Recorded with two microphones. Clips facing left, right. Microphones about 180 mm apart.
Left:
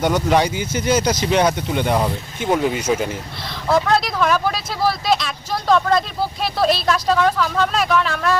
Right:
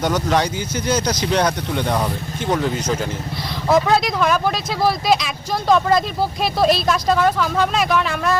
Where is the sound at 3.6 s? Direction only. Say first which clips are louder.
Right 1 dB; 5° right (ahead or behind).